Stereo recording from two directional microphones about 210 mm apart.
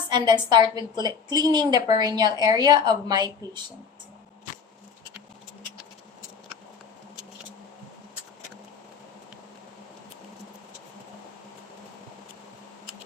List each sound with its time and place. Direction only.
0.1 s a woman's voice: 20° right (ahead or behind)